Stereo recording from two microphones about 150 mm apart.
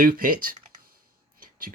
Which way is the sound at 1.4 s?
70° right (ahead or behind).